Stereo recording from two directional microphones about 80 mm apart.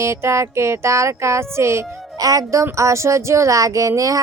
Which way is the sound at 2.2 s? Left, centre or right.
Right.